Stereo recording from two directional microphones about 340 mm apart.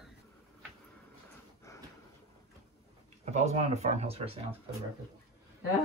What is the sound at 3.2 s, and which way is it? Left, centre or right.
Speech, centre.